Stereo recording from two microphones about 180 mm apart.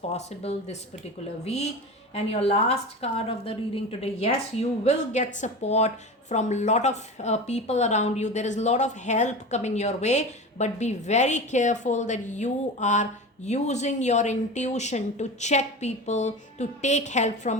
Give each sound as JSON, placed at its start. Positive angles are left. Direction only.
{"t": 0.1, "sound": "a woman's voice", "side_deg": 35}
{"t": 2.1, "sound": "a woman's voice", "side_deg": 35}